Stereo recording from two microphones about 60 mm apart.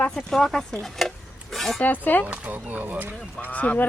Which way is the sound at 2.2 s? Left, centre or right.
Right.